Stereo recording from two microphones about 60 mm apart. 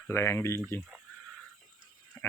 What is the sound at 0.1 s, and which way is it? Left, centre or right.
Speech, left.